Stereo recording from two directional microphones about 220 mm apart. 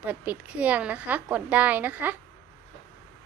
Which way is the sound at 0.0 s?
5° right (ahead or behind).